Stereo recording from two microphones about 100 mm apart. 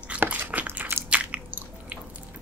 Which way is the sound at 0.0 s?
15° right (ahead or behind).